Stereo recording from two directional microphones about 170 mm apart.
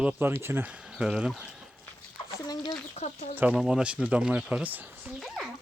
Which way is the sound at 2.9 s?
40° left (ahead or behind).